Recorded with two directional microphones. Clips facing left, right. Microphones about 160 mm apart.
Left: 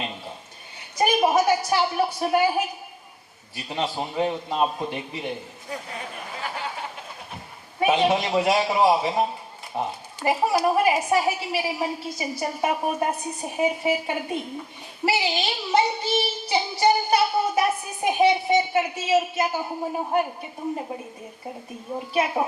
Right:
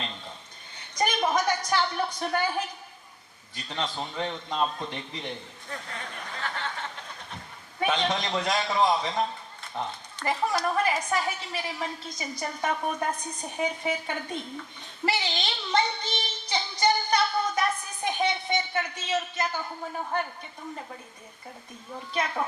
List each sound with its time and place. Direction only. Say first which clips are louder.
0.9 s a woman's voice: left 6 dB; 10° left (ahead or behind)
15.0 s child singing: left 5 dB; 10° left (ahead or behind)
19.6 s a man's voice: left 7 dB; 30° left (ahead or behind)
20.1 s a woman's voice: left 8 dB; 10° left (ahead or behind)
20.6 s a woman's voice: left 10 dB; 25° left (ahead or behind)
22.1 s a woman's voice: left 6 dB; 10° left (ahead or behind)